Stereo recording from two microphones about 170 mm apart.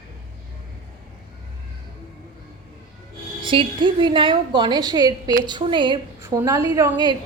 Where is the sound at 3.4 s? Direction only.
30° right (ahead or behind).